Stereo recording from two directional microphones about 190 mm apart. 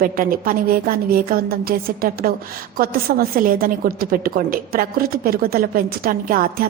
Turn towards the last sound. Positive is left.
turn(degrees=-50)  # may be behind; listen again after turning